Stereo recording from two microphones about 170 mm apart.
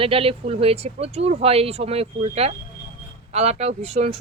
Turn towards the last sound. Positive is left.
turn(degrees=-40)  # may be behind; listen again after turning